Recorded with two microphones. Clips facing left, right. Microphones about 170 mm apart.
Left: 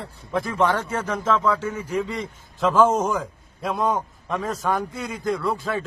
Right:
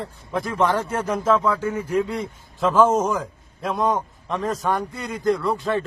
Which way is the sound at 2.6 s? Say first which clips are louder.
Right 1 dB; centre (ahead or behind).